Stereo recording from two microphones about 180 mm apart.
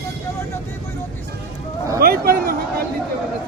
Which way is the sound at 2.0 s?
55° right (ahead or behind).